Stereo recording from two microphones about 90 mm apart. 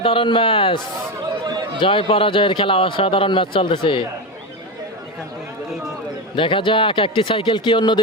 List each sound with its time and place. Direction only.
0.0 s speech: 75° left (ahead or behind)
1.5 s chatter: 50° right (ahead or behind)
1.8 s speech: 80° left
6.3 s speech: 70° left (ahead or behind)